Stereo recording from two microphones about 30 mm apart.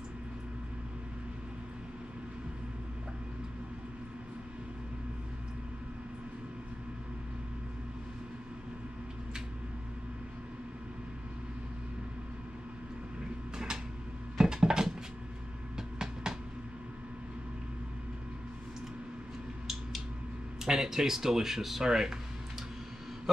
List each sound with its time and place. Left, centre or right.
14.4 s dishes: right
15.7 s vehicle: right
20.6 s speech: centre